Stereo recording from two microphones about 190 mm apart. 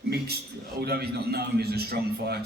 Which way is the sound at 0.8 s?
55° right (ahead or behind).